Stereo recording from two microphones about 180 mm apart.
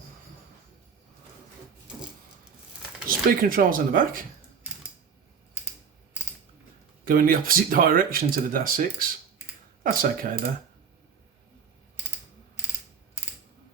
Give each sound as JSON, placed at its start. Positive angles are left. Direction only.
{"t": 3.1, "sound": "speech", "side_deg": -50}
{"t": 7.0, "sound": "speech", "side_deg": -50}